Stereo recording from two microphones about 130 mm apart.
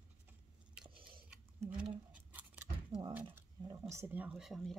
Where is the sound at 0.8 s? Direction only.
40° right (ahead or behind).